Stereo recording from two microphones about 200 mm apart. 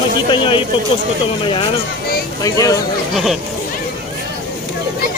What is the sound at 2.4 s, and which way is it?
Speech, 15° left (ahead or behind).